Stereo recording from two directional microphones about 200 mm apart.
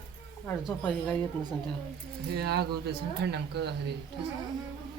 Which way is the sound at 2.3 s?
55° right (ahead or behind).